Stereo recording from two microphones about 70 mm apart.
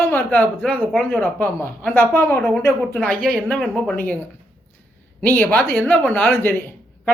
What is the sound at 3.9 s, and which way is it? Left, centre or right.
Speech, left.